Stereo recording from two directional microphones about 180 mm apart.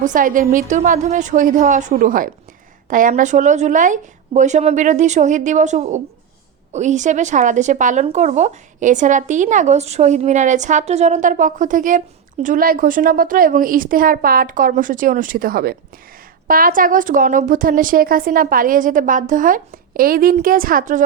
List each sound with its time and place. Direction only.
0.0 s speech: 45° right (ahead or behind)